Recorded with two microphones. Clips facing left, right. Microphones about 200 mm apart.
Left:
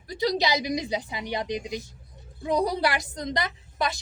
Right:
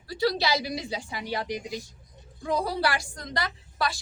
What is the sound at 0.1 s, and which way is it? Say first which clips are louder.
A woman's voice: left 1 dB; 20° left (ahead or behind).